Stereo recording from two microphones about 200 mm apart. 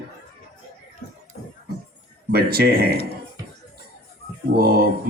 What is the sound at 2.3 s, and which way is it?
Speech, 50° right (ahead or behind).